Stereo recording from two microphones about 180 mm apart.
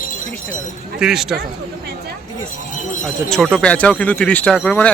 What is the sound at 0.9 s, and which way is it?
Speech, 5° right (ahead or behind).